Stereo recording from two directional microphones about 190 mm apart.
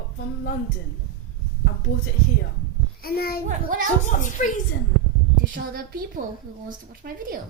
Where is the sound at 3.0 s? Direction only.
50° left (ahead or behind).